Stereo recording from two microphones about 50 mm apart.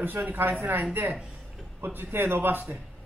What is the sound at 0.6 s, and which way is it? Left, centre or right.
A man's voice, right.